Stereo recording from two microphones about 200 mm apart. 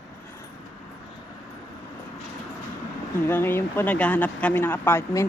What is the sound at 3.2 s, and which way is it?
Speech, 10° left (ahead or behind).